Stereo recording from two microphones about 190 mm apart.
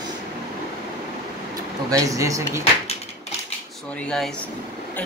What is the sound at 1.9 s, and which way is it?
Speech, 15° right (ahead or behind).